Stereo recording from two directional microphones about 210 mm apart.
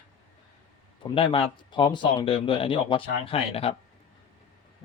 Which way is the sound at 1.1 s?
25° left (ahead or behind).